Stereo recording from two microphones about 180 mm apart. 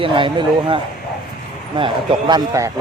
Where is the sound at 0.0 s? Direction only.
30° right (ahead or behind).